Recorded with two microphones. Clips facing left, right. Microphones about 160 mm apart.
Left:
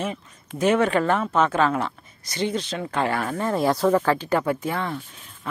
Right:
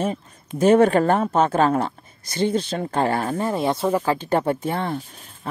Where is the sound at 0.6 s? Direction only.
35° right (ahead or behind); by 4.2 s 15° right (ahead or behind).